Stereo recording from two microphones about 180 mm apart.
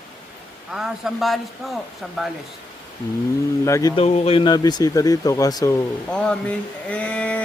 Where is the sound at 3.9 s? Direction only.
35° left (ahead or behind).